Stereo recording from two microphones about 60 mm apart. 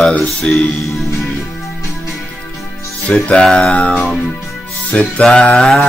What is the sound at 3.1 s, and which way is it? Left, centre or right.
Mantra, centre.